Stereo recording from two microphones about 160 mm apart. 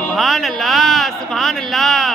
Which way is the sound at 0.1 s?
Centre (ahead or behind).